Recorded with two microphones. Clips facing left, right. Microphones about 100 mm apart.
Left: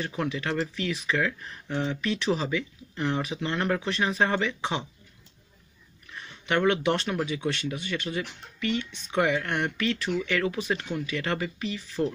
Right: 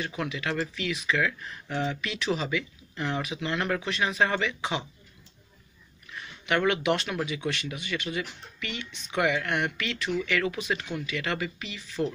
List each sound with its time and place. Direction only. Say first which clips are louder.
0.0 s speech: left 2 dB; 35° left (ahead or behind)
6.1 s speech: left 1 dB; 35° left (ahead or behind)